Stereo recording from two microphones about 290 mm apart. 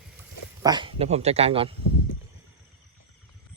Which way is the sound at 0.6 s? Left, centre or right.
Centre.